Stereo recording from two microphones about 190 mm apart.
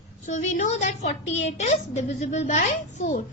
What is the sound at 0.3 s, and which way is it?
A woman's voice, 40° left (ahead or behind).